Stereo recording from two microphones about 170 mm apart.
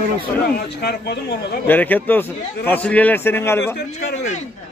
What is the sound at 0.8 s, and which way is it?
Speech, 75° left (ahead or behind).